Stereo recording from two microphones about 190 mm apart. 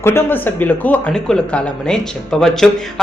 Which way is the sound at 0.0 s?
10° left (ahead or behind).